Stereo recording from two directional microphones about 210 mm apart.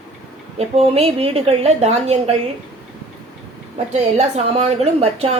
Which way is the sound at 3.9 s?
30° right (ahead or behind).